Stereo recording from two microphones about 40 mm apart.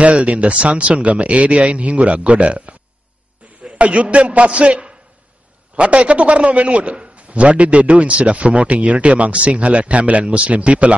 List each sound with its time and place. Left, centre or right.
0.0 s a man's voice: right